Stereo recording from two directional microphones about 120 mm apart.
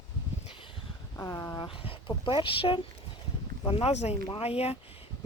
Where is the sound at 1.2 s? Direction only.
20° left (ahead or behind).